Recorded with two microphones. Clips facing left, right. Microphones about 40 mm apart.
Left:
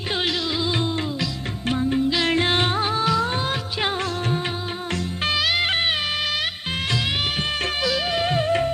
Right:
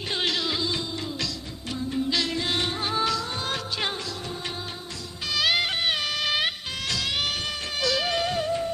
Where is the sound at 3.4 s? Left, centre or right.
Centre.